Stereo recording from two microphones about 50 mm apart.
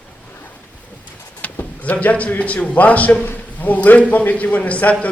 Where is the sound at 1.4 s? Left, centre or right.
Left.